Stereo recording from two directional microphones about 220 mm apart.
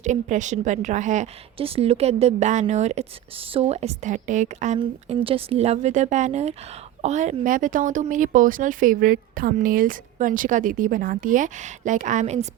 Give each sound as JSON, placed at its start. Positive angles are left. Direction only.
{"t": 0.0, "sound": "a woman's voice", "side_deg": -35}